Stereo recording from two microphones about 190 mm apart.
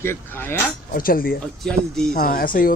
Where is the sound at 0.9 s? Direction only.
50° left (ahead or behind).